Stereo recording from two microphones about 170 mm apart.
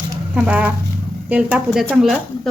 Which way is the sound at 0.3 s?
10° right (ahead or behind).